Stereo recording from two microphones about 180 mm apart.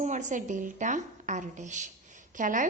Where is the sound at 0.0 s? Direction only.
40° right (ahead or behind).